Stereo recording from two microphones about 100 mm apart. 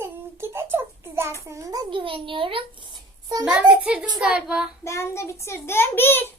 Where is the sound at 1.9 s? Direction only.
60° right (ahead or behind).